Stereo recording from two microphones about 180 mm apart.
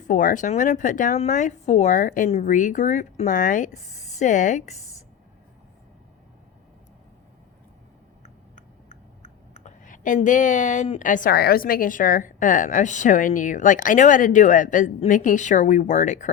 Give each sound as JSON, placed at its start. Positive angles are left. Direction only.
{"t": 0.1, "sound": "speech", "side_deg": 45}
{"t": 9.2, "sound": "speech", "side_deg": 45}